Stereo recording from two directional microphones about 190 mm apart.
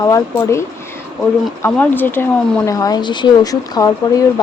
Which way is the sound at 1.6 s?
10° left (ahead or behind).